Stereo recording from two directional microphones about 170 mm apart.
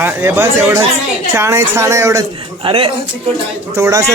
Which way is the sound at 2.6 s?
30° right (ahead or behind).